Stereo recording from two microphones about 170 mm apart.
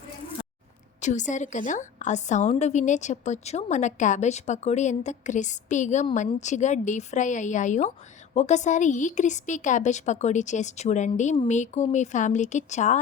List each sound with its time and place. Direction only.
1.0 s a woman's voice: 45° left (ahead or behind)